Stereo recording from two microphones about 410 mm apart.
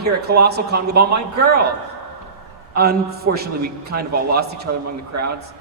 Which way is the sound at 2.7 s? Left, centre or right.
Right.